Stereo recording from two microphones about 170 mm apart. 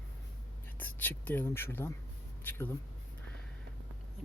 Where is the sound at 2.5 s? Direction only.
10° left (ahead or behind).